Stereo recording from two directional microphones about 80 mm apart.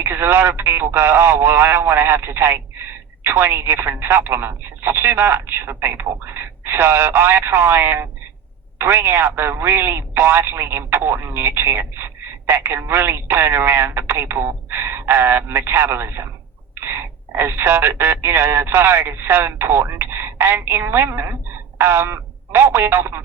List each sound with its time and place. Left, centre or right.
0.0 s speech: right